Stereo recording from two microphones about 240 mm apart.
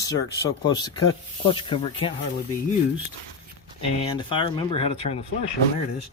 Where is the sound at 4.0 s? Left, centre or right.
Left.